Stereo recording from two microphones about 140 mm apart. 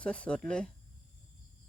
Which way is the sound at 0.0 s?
10° left (ahead or behind).